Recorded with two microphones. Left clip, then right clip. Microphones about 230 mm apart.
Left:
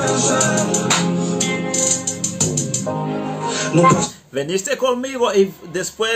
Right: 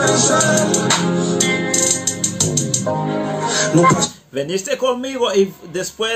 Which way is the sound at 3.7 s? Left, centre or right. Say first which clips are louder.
Even; right.